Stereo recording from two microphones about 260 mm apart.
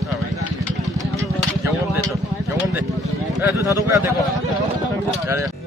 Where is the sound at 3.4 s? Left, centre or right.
Centre.